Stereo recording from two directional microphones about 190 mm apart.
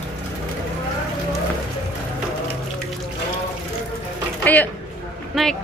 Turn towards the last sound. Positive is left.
turn(degrees=0)  # may be behind; listen again after turning